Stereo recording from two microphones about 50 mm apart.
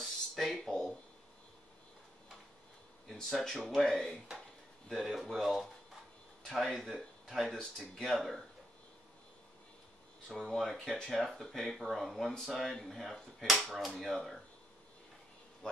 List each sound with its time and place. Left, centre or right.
0.0 s a sound: centre
3.1 s speech: centre
10.2 s speech: centre
15.6 s speech: centre